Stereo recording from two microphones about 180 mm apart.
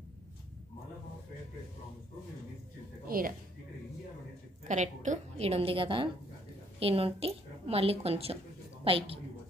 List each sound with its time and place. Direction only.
3.1 s a woman's voice: 50° right (ahead or behind)
4.6 s a woman's voice: 40° right (ahead or behind)